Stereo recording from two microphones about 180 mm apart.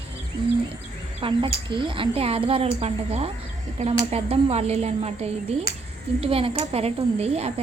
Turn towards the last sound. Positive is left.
turn(degrees=-35)  # may be behind; listen again after turning